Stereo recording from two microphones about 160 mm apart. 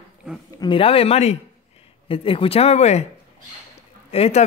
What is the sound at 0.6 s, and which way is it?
Speech, 35° left (ahead or behind).